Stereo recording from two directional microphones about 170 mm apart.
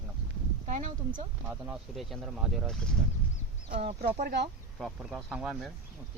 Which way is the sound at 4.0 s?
70° right (ahead or behind).